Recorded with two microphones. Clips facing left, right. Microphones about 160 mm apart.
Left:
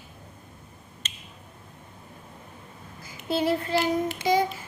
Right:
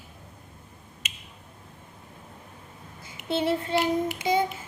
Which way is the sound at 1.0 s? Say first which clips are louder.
Right 1 dB; 15° right (ahead or behind).